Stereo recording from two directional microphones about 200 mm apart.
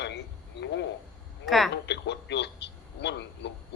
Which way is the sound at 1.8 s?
60° left (ahead or behind).